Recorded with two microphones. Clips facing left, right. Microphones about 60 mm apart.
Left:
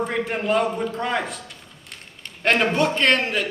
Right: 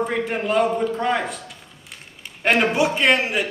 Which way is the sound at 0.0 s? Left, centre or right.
Centre.